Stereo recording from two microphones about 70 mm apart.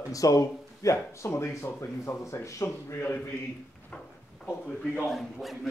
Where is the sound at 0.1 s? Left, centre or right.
Left.